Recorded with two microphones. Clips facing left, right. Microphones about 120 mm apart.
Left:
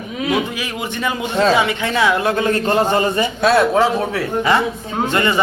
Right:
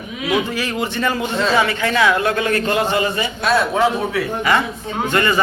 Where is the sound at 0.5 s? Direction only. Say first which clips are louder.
Right 3 dB; 10° left (ahead or behind); by 3.2 s 40° left (ahead or behind).